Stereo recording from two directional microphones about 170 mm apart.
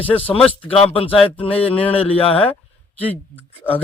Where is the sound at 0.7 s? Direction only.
35° left (ahead or behind).